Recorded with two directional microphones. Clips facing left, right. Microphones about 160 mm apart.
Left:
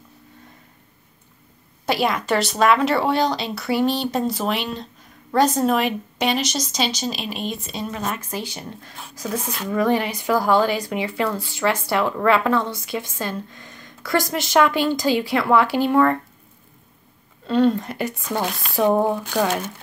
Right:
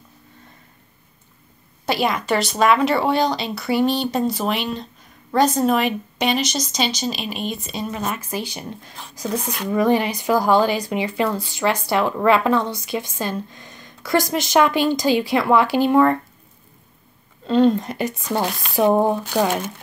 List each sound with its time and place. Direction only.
1.9 s a woman's voice: centre (ahead or behind); by 16.2 s 20° right (ahead or behind)
17.5 s speech: 20° right (ahead or behind)